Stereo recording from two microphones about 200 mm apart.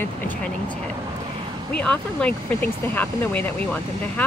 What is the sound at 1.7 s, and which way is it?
Speech, 5° left (ahead or behind).